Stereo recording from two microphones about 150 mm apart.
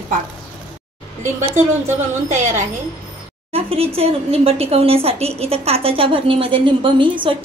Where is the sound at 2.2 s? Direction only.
50° right (ahead or behind); by 7.3 s 35° right (ahead or behind).